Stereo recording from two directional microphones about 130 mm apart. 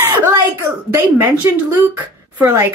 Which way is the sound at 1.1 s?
15° right (ahead or behind).